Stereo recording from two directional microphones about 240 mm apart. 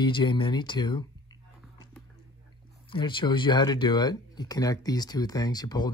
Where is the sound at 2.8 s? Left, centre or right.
Centre.